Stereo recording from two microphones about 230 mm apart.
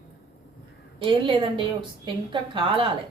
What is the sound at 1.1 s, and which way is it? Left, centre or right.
A woman's voice, right.